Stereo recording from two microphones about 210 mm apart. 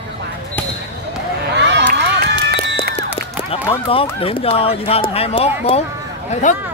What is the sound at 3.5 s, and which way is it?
Speech, 25° left (ahead or behind).